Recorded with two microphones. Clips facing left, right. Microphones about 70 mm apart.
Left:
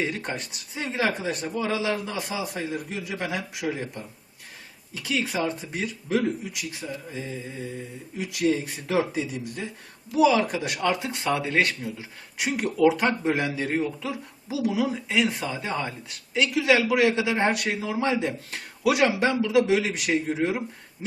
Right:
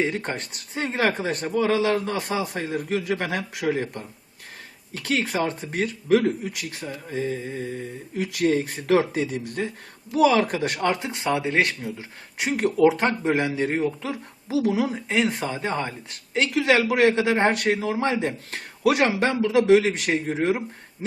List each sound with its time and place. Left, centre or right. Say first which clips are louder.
0.0 s speech: right 4 dB; right
0.3 s speech: right 3 dB; right
6.2 s speech: right 3 dB; right
10.5 s speech: right 2 dB; right
11.0 s a man's voice: right 2 dB; right
12.4 s a man's voice: right 3 dB; right
14.7 s a man's voice: right 2 dB; right